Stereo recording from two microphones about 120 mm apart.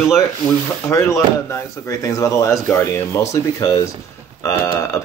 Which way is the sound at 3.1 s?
25° left (ahead or behind).